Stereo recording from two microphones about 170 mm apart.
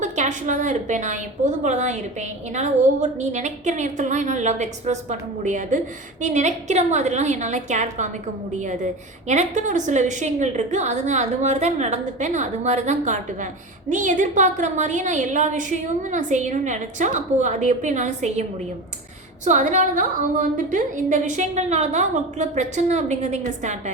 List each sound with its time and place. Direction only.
0.0 s a woman's voice: 45° right (ahead or behind)
19.5 s a woman's voice: 45° right (ahead or behind)